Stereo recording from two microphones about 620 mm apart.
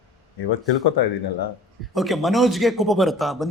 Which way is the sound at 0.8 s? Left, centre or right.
Left.